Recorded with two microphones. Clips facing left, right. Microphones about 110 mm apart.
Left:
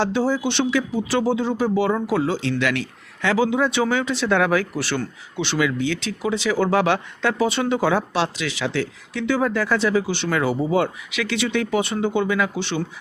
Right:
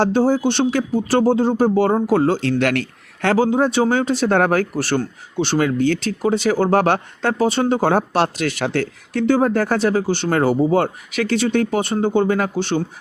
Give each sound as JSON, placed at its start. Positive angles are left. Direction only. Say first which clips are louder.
{"t": 0.0, "sound": "speech", "louder": "right 5 dB", "side_deg": -45}